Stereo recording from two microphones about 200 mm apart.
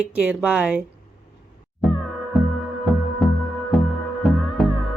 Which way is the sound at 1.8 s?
Centre (ahead or behind).